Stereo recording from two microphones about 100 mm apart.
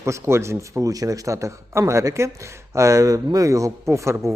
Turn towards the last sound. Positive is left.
turn(degrees=-30)  # may be behind; listen again after turning